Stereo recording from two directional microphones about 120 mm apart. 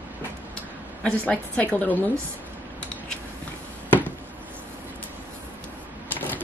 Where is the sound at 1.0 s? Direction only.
10° left (ahead or behind).